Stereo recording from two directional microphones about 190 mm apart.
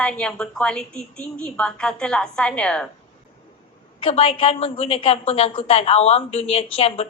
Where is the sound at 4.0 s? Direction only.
30° left (ahead or behind).